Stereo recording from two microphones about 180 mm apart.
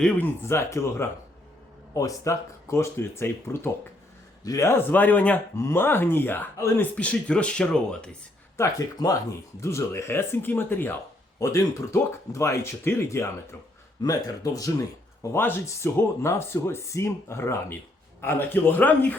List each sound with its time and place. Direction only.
0.0 s speech: 10° left (ahead or behind)
8.5 s speech: 20° left (ahead or behind)